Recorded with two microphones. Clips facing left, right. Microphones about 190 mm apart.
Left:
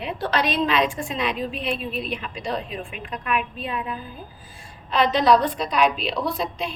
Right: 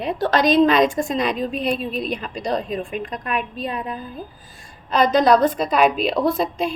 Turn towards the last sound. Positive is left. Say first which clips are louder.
# right 6 dB
turn(degrees=-45)  # may be behind; listen again after turning